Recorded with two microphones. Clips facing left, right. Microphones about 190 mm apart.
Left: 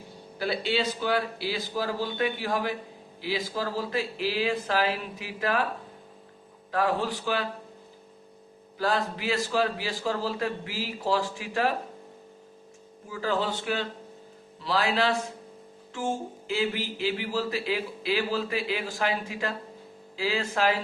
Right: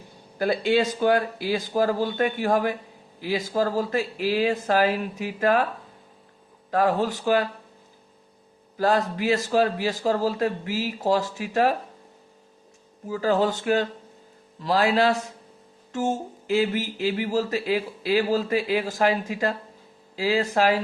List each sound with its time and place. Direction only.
0.3 s speech: 50° right (ahead or behind)
6.7 s speech: 45° right (ahead or behind)
8.8 s speech: 45° right (ahead or behind)
13.1 s speech: 40° right (ahead or behind)